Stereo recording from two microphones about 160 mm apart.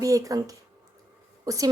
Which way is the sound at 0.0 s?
20° right (ahead or behind).